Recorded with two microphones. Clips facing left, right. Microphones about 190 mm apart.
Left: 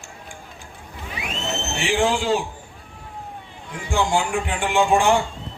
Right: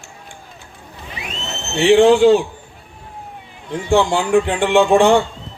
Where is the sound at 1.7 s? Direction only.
65° right (ahead or behind).